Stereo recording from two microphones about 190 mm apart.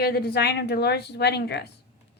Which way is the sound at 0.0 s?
55° left (ahead or behind).